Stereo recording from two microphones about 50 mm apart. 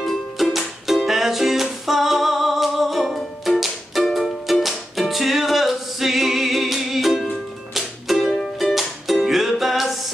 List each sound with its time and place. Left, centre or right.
0.0 s music: centre